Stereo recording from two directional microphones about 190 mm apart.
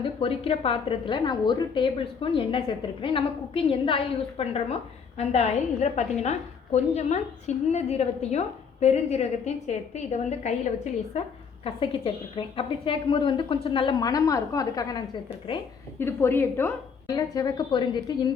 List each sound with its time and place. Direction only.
0.0 s a woman's voice: 30° left (ahead or behind)